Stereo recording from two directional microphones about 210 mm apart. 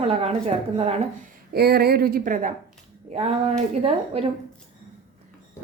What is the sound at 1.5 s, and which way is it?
A woman's voice, 50° right (ahead or behind).